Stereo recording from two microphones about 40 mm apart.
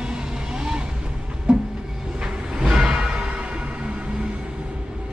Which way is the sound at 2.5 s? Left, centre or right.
Centre.